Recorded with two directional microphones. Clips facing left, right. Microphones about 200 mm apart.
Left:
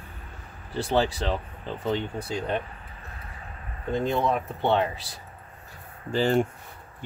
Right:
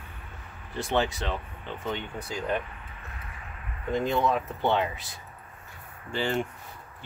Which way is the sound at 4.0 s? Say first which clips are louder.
Left 1 dB; 25° left (ahead or behind).